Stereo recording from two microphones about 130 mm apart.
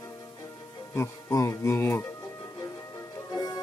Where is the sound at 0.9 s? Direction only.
20° left (ahead or behind).